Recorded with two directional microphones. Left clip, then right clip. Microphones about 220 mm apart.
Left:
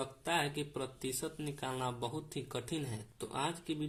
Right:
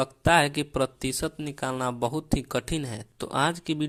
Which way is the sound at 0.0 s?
35° right (ahead or behind).